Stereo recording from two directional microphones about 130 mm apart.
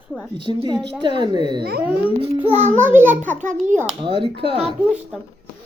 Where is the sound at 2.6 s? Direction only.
65° right (ahead or behind).